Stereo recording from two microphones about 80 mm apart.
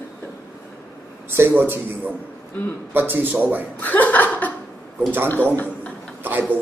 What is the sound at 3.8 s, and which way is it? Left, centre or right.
Speech, left.